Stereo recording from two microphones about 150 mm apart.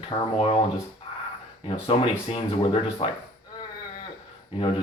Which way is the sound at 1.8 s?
40° left (ahead or behind).